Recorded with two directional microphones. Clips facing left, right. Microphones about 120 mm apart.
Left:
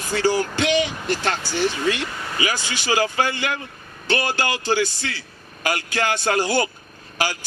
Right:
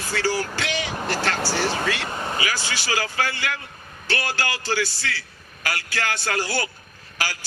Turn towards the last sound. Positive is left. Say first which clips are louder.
# left 5 dB
turn(degrees=20)  # may be behind; listen again after turning